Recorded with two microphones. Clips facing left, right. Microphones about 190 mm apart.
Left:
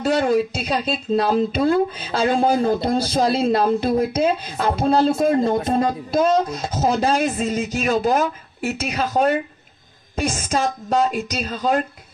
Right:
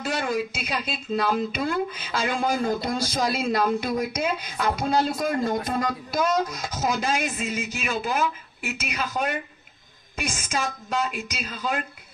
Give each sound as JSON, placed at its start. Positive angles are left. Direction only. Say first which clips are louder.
{"t": 0.0, "sound": "speech", "louder": "left 8 dB", "side_deg": 35}